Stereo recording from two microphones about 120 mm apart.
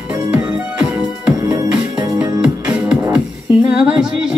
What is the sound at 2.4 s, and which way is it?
Music, 10° right (ahead or behind).